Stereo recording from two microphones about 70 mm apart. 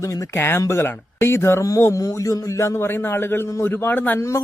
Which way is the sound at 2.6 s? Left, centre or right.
Left.